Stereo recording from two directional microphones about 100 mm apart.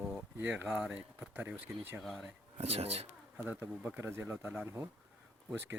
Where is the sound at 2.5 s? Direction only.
90° right.